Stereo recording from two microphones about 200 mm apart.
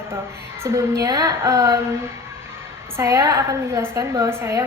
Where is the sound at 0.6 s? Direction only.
15° right (ahead or behind).